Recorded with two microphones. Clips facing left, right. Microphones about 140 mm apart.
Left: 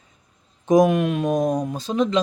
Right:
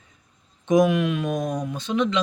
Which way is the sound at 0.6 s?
40° left (ahead or behind).